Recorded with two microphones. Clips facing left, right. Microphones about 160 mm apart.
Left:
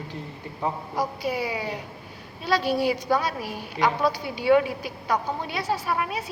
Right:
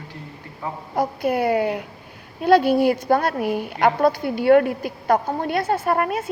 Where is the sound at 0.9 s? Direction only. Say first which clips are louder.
Right 10 dB; 55° right (ahead or behind).